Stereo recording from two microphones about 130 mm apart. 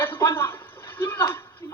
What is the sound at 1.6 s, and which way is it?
Music, 25° left (ahead or behind).